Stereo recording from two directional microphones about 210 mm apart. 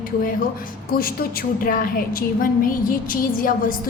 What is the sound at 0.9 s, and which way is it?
A woman's voice, 45° left (ahead or behind).